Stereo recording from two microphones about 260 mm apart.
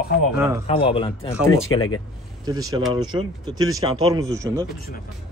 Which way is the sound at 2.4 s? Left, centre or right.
Centre.